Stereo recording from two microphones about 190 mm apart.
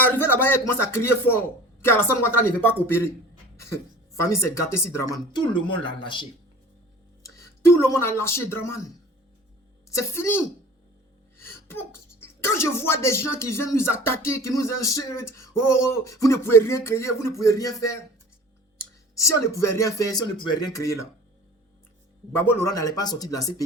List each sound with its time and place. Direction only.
0.0 s speech: 10° left (ahead or behind)
4.1 s speech: 15° left (ahead or behind)
7.8 s speech: 15° left (ahead or behind)
11.3 s speech: 10° left (ahead or behind)
22.4 s speech: 10° left (ahead or behind)